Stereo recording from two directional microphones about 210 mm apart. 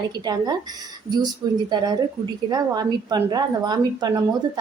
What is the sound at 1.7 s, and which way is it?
A woman's voice, 20° right (ahead or behind).